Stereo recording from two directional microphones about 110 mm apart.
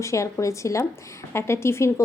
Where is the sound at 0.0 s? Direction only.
25° left (ahead or behind).